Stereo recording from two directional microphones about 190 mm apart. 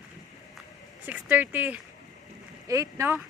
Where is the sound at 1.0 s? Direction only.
10° right (ahead or behind).